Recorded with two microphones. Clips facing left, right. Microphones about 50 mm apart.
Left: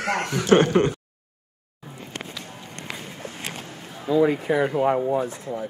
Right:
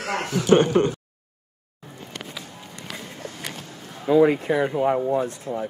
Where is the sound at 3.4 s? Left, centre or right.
Left.